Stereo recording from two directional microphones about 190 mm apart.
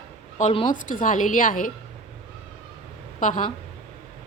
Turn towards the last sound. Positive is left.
turn(degrees=40)  # may be behind; listen again after turning